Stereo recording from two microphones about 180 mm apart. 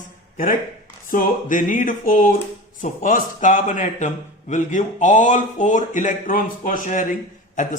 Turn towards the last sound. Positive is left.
turn(degrees=45)  # may be behind; listen again after turning